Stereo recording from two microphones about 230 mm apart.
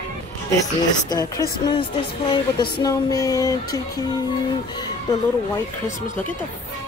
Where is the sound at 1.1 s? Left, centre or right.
Centre.